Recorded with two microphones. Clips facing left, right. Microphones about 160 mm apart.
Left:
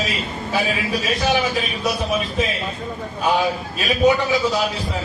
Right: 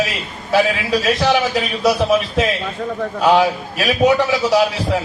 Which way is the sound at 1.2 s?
80° right.